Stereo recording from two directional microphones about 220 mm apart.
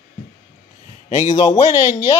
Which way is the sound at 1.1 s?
30° left (ahead or behind).